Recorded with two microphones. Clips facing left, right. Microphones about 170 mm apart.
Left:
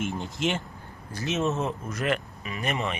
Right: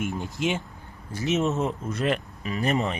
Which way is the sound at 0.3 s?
15° right (ahead or behind).